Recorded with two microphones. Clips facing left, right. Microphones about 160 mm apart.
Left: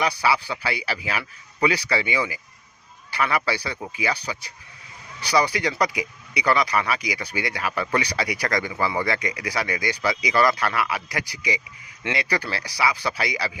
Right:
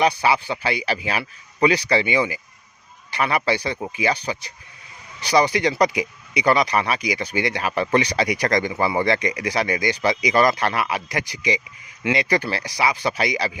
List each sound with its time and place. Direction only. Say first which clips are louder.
0.0 s speech: right 4 dB; 20° right (ahead or behind)